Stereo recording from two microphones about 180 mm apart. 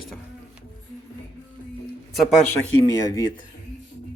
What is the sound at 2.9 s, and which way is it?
Speech, 20° left (ahead or behind).